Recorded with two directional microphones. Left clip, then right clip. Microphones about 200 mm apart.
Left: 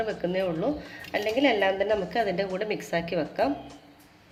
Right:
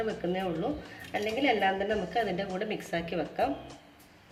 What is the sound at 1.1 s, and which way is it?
A woman's voice, 45° left (ahead or behind).